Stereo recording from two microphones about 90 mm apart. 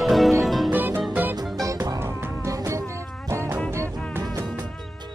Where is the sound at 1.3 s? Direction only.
40° right (ahead or behind).